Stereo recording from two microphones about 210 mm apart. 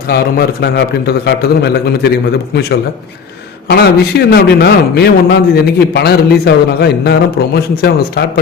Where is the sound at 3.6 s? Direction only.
50° left (ahead or behind).